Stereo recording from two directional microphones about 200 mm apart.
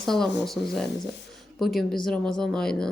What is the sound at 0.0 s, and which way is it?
Speech, centre (ahead or behind).